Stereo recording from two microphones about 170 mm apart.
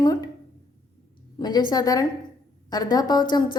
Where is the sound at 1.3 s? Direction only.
25° left (ahead or behind).